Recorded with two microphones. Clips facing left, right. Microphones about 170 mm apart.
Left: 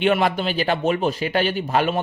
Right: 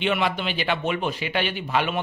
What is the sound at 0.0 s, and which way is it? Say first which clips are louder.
Speech: left 5 dB; 45° left (ahead or behind).